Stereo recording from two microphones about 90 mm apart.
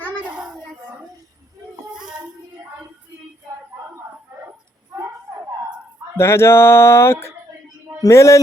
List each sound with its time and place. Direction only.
6.1 s speech: 30° left (ahead or behind)